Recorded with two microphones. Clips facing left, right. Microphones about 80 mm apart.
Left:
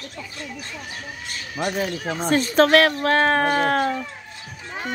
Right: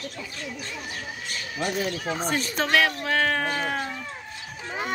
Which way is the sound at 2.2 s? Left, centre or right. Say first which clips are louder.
Left 9 dB; left.